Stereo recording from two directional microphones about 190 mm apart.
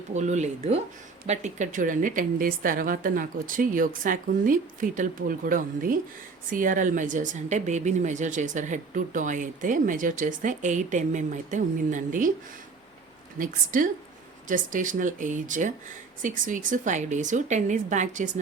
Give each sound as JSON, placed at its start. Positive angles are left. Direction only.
{"t": 0.1, "sound": "a woman's voice", "side_deg": -40}
{"t": 13.4, "sound": "a woman's voice", "side_deg": -45}